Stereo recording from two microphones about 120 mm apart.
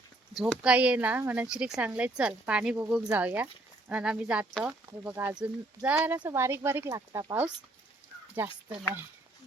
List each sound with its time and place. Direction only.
0.6 s speech: 10° right (ahead or behind)
1.5 s speech: 5° right (ahead or behind)